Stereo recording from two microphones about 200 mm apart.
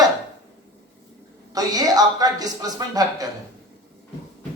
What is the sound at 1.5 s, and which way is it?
A woman's voice, 20° right (ahead or behind).